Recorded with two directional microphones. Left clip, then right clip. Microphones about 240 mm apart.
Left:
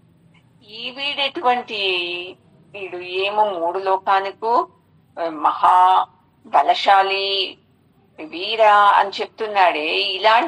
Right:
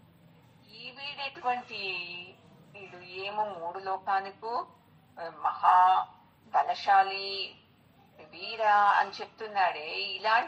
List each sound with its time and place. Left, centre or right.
0.7 s a woman's voice: left